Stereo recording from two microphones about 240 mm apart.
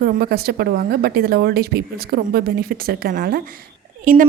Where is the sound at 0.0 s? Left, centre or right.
Right.